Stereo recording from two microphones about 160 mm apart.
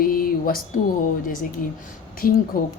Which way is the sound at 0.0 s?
65° left (ahead or behind).